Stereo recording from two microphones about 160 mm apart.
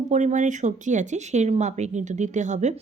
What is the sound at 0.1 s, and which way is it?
Speech, 50° right (ahead or behind).